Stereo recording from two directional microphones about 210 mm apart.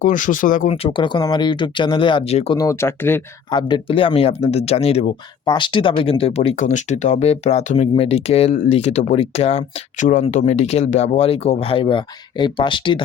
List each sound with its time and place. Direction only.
0.0 s speech: 40° left (ahead or behind)
0.7 s speech: 25° left (ahead or behind)
2.6 s speech: 15° left (ahead or behind)